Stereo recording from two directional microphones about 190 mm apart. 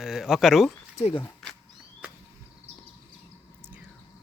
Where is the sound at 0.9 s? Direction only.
35° left (ahead or behind).